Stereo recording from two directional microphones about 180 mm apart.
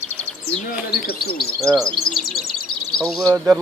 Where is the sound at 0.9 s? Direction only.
60° left (ahead or behind).